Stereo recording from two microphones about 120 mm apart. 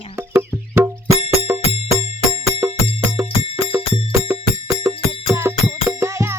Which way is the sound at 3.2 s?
50° left (ahead or behind).